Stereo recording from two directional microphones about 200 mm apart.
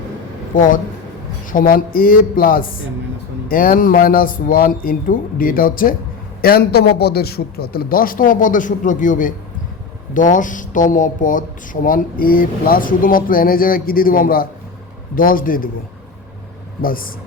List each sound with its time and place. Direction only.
0.5 s speech: 40° left (ahead or behind)
16.8 s speech: 45° left (ahead or behind)